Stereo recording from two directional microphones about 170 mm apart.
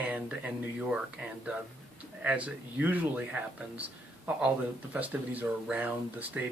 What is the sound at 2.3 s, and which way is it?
Speech, 10° right (ahead or behind).